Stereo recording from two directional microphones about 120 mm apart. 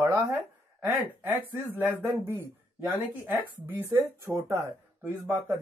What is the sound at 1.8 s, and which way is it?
Speech, 20° right (ahead or behind).